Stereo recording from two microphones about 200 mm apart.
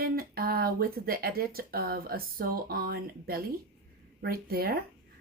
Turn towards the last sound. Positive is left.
turn(degrees=-50)  # may be behind; listen again after turning